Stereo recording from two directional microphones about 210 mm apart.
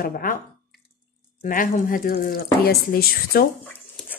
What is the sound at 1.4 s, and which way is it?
Speech, 40° left (ahead or behind).